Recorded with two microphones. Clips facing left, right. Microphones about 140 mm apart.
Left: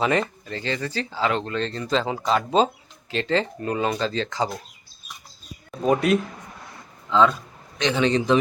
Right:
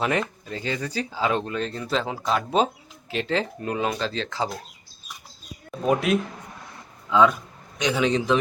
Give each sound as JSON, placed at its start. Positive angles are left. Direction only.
{"t": 0.0, "sound": "speech", "side_deg": -5}
{"t": 5.8, "sound": "speech", "side_deg": 0}